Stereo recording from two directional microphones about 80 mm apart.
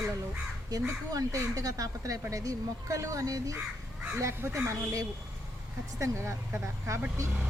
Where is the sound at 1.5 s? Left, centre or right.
Right.